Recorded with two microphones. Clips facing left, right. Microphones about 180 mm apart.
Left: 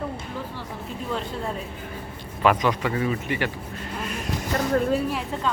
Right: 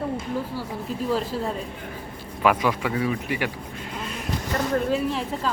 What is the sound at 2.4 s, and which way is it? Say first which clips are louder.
Speech: even; 10° right (ahead or behind).